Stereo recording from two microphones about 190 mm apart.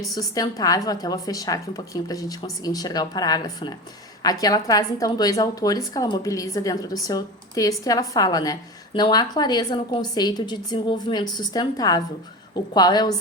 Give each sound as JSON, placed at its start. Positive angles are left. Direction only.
{"t": 0.1, "sound": "a woman's voice", "side_deg": 20}